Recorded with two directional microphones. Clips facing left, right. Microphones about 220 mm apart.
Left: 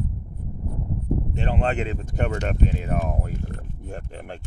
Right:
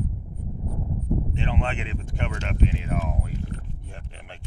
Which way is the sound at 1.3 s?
40° left (ahead or behind).